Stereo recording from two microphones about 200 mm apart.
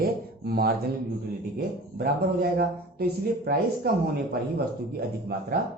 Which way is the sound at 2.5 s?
50° right (ahead or behind).